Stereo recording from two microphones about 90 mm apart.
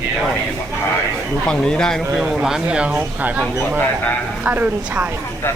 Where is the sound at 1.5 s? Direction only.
10° left (ahead or behind).